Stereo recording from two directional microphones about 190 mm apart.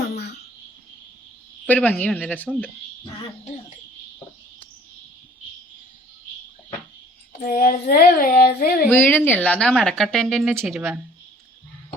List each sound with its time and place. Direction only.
1.6 s speech: 10° left (ahead or behind)
7.4 s a sound: 50° left (ahead or behind)
8.9 s a woman's voice: 10° left (ahead or behind)